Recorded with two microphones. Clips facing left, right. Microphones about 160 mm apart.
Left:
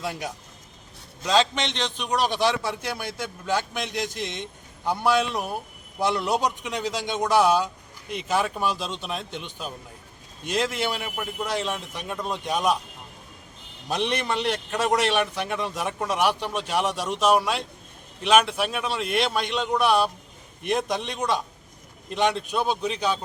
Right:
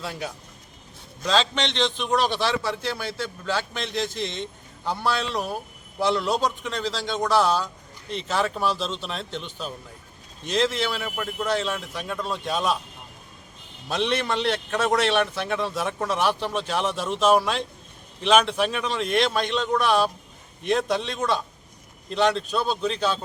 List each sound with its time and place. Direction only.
0.0 s a man's voice: 15° left (ahead or behind)
13.8 s a man's voice: 15° left (ahead or behind)